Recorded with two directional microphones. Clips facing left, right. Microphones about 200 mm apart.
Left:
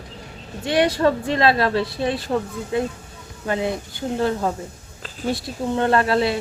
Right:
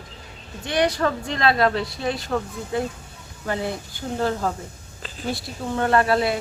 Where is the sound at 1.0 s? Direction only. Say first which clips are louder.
Left 4 dB; 30° left (ahead or behind).